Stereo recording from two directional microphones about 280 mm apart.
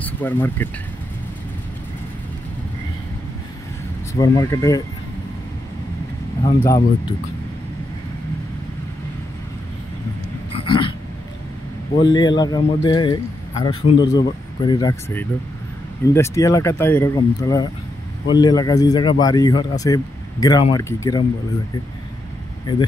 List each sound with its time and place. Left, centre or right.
0.0 s speech: centre
4.1 s speech: centre
6.4 s speech: centre
10.5 s a sound: centre
12.0 s speech: centre